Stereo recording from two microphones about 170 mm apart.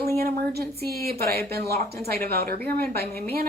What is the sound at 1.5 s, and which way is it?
Speech, 65° right (ahead or behind).